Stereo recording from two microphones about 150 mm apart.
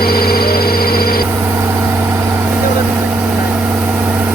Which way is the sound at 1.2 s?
15° right (ahead or behind).